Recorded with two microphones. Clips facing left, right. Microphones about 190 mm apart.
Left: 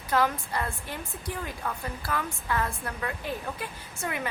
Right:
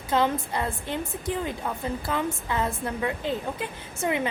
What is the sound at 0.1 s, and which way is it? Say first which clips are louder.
A woman's voice: right 2 dB; 25° right (ahead or behind).